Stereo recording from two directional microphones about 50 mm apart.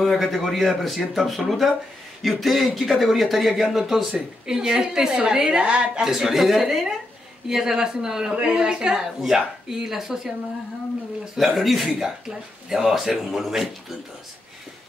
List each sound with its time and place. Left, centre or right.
0.0 s a woman's voice: centre
6.0 s a woman's voice: centre
11.3 s a woman's voice: centre